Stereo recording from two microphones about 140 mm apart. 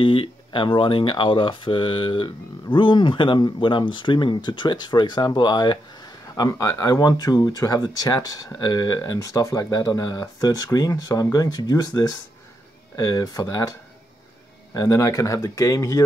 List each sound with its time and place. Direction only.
0.0 s speech: 40° left (ahead or behind); by 16.0 s 25° left (ahead or behind)